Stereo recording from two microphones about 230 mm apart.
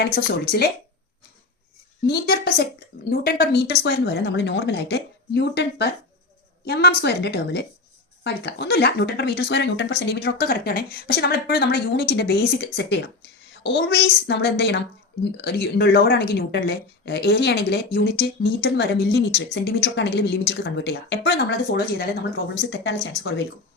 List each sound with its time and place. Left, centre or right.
0.0 s speech: left
2.0 s speech: left